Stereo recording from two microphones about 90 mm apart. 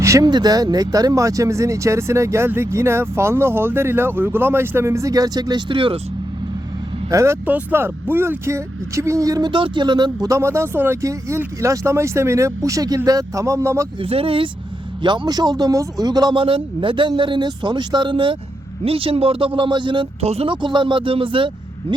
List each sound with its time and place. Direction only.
0.0 s a sound: 35° right (ahead or behind)
0.3 s speech: 50° right (ahead or behind); by 6.0 s 75° right (ahead or behind)
7.1 s speech: 35° right (ahead or behind)
7.4 s speech: 20° right (ahead or behind); by 9.5 s 40° right (ahead or behind)
9.5 s speech: 70° right (ahead or behind)
10.2 s speech: 35° right (ahead or behind)
14.0 s speech: 90° right
15.0 s speech: 60° right (ahead or behind)
16.4 s speech: 70° right (ahead or behind)
18.9 s speech: 90° right; by 21.9 s 70° right (ahead or behind)